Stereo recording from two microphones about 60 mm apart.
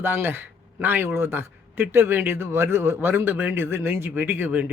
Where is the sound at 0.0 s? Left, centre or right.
Right.